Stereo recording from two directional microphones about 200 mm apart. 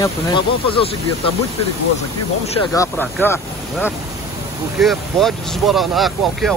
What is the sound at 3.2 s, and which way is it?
Speech, 10° left (ahead or behind).